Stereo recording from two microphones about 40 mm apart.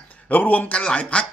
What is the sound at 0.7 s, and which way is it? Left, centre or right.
Speech, left.